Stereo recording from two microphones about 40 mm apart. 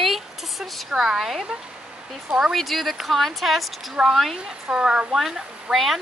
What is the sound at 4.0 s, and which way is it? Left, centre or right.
Speech, centre.